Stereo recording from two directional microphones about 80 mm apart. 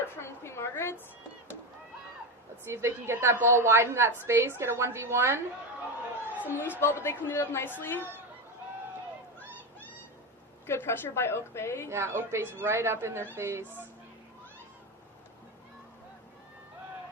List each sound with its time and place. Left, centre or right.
0.2 s a sound: left
2.6 s a woman's voice: right
6.2 s a sound: left
6.7 s a woman's voice: left
10.7 s a woman's voice: left
11.9 s a woman's voice: right